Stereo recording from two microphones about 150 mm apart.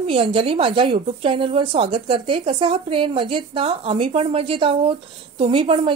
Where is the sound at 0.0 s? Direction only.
40° right (ahead or behind).